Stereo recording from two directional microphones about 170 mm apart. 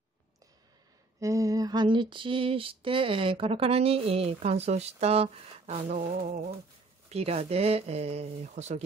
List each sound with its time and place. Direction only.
1.2 s female singing: 20° right (ahead or behind); by 8.8 s 40° right (ahead or behind)